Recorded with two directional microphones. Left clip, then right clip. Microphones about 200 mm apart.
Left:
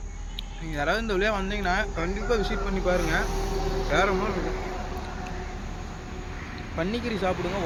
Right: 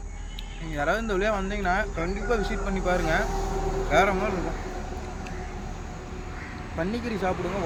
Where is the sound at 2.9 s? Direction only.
50° right (ahead or behind).